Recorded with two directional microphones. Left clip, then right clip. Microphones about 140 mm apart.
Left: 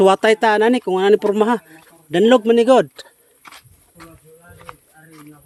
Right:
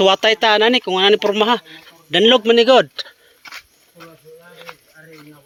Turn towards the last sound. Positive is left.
turn(degrees=15)  # may be behind; listen again after turning